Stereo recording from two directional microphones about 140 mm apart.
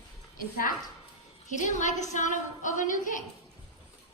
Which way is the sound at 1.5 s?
60° left (ahead or behind).